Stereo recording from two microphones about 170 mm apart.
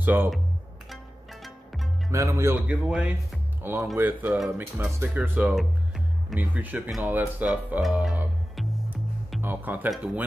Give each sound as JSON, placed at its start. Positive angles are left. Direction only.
{"t": 0.0, "sound": "speech", "side_deg": -10}
{"t": 2.0, "sound": "speech", "side_deg": -20}
{"t": 2.6, "sound": "speech", "side_deg": -5}